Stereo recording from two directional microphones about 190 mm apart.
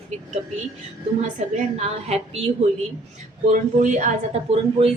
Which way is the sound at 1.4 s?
40° right (ahead or behind).